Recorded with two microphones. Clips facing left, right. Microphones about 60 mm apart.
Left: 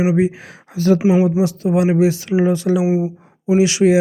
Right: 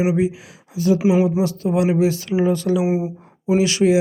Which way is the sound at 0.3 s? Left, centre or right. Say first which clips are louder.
Left 3 dB; left.